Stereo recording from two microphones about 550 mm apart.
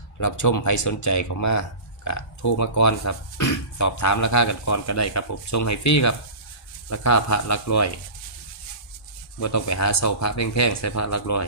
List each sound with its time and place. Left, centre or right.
0.2 s speech: left
9.4 s speech: left